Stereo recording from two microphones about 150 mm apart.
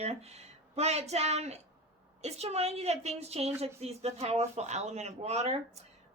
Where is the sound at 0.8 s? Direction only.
45° right (ahead or behind).